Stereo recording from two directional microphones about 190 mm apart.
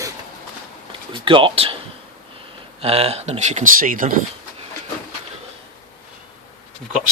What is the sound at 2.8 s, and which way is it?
Speech, 30° right (ahead or behind).